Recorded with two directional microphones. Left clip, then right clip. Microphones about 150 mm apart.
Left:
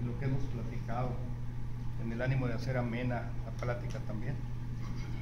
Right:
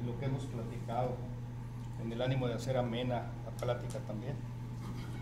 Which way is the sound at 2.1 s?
15° right (ahead or behind).